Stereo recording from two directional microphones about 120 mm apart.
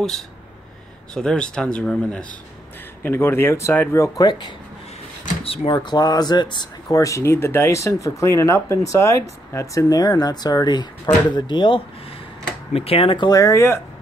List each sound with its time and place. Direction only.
1.1 s speech: 5° left (ahead or behind)
3.0 s speech: 20° left (ahead or behind)
5.4 s drawer open or close: 55° left (ahead or behind)
5.7 s speech: 40° left (ahead or behind)
12.7 s speech: 55° left (ahead or behind)
13.3 s speech: 25° left (ahead or behind)